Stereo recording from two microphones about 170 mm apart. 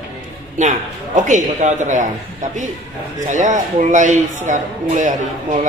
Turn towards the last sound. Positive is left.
turn(degrees=-45)  # may be behind; listen again after turning